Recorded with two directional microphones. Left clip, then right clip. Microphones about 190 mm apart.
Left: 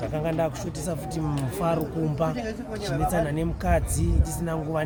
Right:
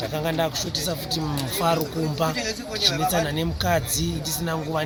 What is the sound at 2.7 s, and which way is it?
Speech, 35° left (ahead or behind).